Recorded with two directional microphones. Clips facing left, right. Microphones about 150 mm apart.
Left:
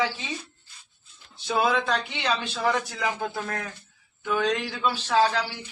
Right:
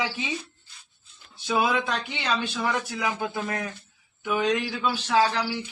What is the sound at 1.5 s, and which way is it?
Speech, 5° right (ahead or behind).